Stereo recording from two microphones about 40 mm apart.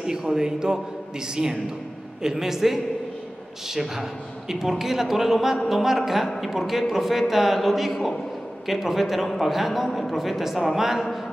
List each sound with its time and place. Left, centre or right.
0.0 s a man's voice: centre